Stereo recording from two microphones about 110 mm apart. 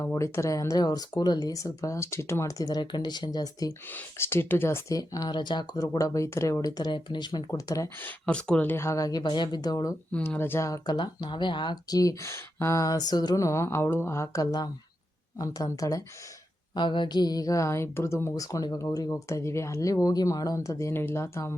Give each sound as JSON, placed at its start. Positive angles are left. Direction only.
{"t": 0.0, "sound": "speech", "side_deg": 25}
{"t": 3.8, "sound": "speech", "side_deg": 20}
{"t": 4.9, "sound": "speech", "side_deg": 35}
{"t": 7.9, "sound": "speech", "side_deg": 15}
{"t": 10.2, "sound": "speech", "side_deg": 20}
{"t": 10.7, "sound": "speech", "side_deg": 40}
{"t": 16.7, "sound": "speech", "side_deg": 45}